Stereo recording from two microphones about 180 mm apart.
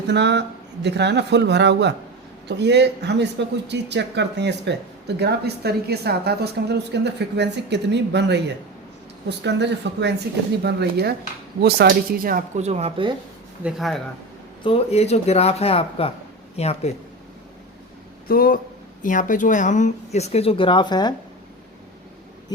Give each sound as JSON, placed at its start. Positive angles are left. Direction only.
{"t": 0.1, "sound": "speech", "side_deg": -70}
{"t": 13.7, "sound": "speech", "side_deg": 0}
{"t": 14.6, "sound": "speech", "side_deg": 35}
{"t": 18.3, "sound": "speech", "side_deg": 55}